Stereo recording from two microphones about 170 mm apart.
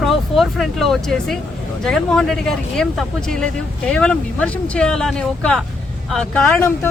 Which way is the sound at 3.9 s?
5° left (ahead or behind).